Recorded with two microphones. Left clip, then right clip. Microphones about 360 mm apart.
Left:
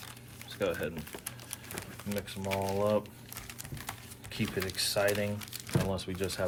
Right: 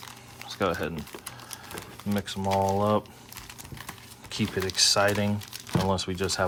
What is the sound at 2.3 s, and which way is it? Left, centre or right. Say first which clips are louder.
Speech: right 9 dB; right.